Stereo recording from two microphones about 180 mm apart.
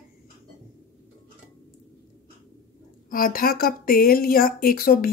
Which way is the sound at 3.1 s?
50° left (ahead or behind).